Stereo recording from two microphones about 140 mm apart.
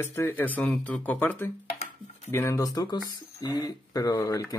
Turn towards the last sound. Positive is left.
turn(degrees=25)  # may be behind; listen again after turning